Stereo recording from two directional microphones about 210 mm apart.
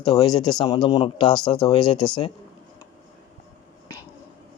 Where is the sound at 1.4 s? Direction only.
5° left (ahead or behind).